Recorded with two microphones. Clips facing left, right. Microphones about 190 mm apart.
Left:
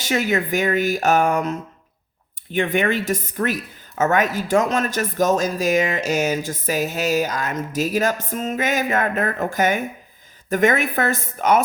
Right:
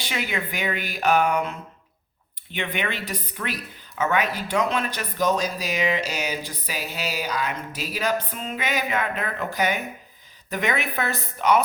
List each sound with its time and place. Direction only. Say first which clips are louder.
0.0 s speech: left 8 dB; 45° left (ahead or behind)